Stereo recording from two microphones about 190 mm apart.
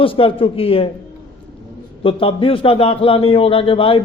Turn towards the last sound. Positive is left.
turn(degrees=30)  # may be behind; listen again after turning